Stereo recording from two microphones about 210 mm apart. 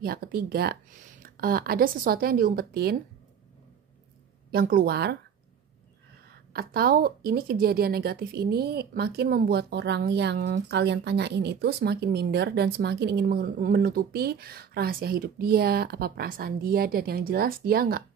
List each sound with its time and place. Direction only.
0.0 s speech: 45° right (ahead or behind)
4.5 s speech: 45° right (ahead or behind)
6.3 s speech: 45° right (ahead or behind)